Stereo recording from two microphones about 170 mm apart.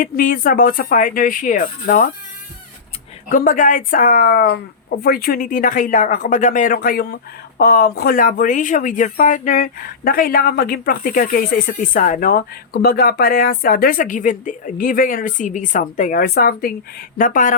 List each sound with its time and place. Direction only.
0.0 s speech: 55° left (ahead or behind)
3.2 s speech: 50° left (ahead or behind)
17.2 s speech: 50° left (ahead or behind)